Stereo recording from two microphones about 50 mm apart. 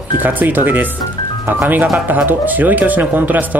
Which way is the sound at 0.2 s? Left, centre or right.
Right.